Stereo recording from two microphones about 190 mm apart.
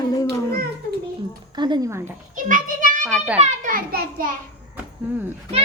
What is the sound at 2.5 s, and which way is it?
Speech, 45° right (ahead or behind).